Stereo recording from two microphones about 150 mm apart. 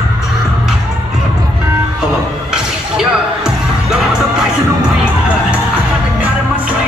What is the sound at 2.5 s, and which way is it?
Music, 5° right (ahead or behind).